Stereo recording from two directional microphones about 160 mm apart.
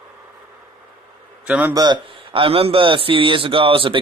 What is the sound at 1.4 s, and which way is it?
Speech, 10° right (ahead or behind).